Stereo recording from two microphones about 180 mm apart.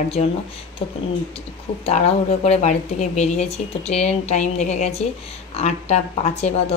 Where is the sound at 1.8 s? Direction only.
35° left (ahead or behind).